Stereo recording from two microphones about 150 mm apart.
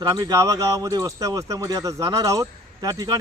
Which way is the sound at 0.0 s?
25° right (ahead or behind).